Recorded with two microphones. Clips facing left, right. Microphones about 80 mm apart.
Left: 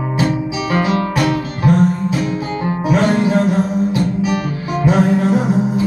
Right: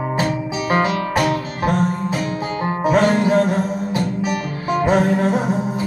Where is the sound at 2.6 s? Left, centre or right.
Right.